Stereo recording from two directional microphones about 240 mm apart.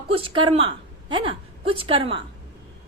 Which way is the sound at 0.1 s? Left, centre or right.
Right.